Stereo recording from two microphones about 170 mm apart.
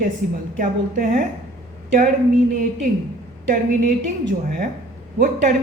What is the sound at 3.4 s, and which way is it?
A woman's voice, 65° right (ahead or behind).